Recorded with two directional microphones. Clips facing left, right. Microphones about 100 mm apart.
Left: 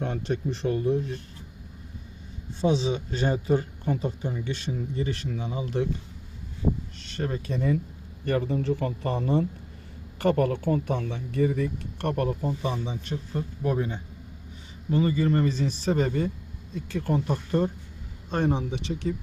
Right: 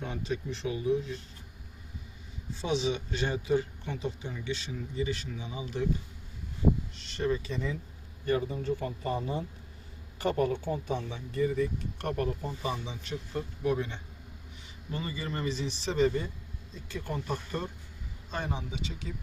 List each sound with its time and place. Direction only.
0.0 s speech: 70° left (ahead or behind)
2.6 s speech: 35° left (ahead or behind); by 5.8 s 50° left (ahead or behind)
7.0 s speech: 45° left (ahead or behind); by 12.3 s 65° left (ahead or behind)
12.5 s speech: 50° left (ahead or behind)
13.7 s speech: 35° left (ahead or behind)
14.9 s speech: 50° left (ahead or behind)